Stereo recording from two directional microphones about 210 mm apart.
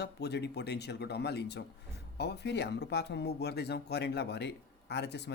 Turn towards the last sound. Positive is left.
turn(degrees=55)  # may be behind; listen again after turning